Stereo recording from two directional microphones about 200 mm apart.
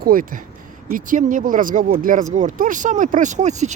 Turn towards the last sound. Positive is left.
turn(degrees=-35)  # may be behind; listen again after turning